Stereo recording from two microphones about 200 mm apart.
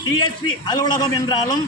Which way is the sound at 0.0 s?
20° left (ahead or behind).